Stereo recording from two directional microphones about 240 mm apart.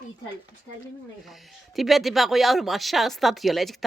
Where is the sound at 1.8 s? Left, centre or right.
Centre.